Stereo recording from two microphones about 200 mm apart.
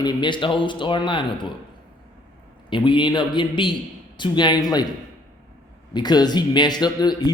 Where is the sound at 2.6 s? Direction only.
25° left (ahead or behind).